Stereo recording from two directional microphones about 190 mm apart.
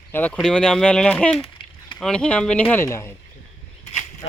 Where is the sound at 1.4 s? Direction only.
25° left (ahead or behind).